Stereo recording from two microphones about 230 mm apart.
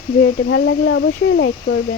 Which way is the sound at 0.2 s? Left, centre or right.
Left.